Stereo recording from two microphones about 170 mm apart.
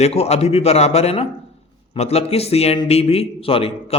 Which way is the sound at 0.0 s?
35° left (ahead or behind).